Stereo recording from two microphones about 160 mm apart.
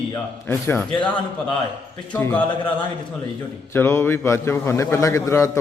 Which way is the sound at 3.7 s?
15° left (ahead or behind).